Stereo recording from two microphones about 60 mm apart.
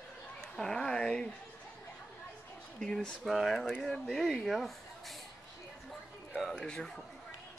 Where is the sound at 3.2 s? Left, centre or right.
Centre.